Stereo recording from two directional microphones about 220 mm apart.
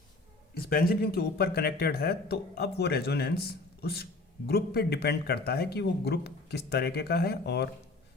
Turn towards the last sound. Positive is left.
turn(degrees=50)  # may be behind; listen again after turning